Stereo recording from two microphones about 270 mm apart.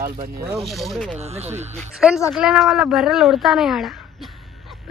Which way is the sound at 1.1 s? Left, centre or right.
Right.